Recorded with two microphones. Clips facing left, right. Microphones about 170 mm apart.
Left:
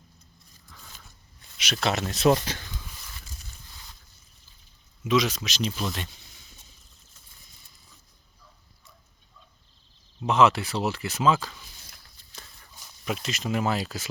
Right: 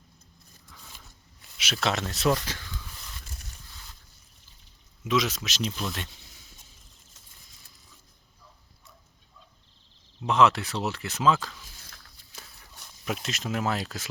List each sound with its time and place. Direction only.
1.5 s speech: centre (ahead or behind)
2.0 s speech: 20° left (ahead or behind)
5.0 s speech: centre (ahead or behind)
10.2 s speech: centre (ahead or behind)
13.1 s speech: centre (ahead or behind)